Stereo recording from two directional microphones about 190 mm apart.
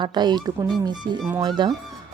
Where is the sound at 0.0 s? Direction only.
25° right (ahead or behind).